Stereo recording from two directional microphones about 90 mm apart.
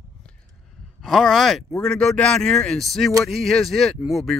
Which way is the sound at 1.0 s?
Centre (ahead or behind).